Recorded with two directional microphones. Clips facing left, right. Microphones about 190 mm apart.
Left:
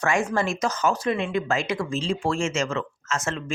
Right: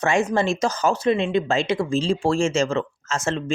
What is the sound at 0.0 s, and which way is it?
Speech, 25° right (ahead or behind).